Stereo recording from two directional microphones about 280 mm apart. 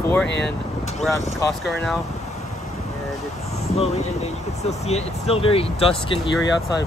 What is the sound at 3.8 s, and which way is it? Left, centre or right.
Speech, left.